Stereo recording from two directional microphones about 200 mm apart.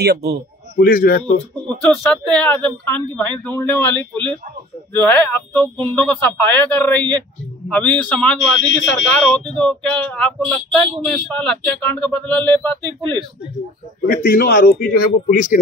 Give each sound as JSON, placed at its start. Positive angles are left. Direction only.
{"t": 0.0, "sound": "a man's voice", "side_deg": -55}
{"t": 0.7, "sound": "a man's voice", "side_deg": 45}
{"t": 1.2, "sound": "speech", "side_deg": 5}
{"t": 14.0, "sound": "a man's voice", "side_deg": 50}